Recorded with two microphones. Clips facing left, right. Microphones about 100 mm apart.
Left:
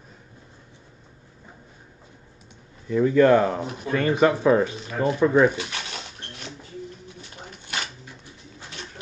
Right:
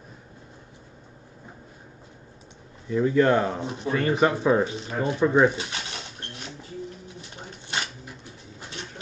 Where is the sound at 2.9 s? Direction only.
15° right (ahead or behind).